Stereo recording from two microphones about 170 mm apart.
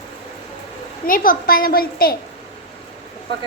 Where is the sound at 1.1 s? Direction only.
55° left (ahead or behind).